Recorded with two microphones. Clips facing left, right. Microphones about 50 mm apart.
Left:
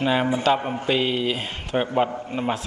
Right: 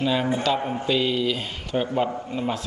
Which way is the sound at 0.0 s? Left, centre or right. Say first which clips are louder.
Left 2 dB; left.